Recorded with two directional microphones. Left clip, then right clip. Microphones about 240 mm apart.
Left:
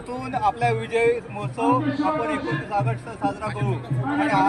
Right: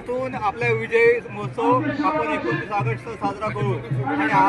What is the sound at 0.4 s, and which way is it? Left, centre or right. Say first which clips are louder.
Speech: left 3 dB; left.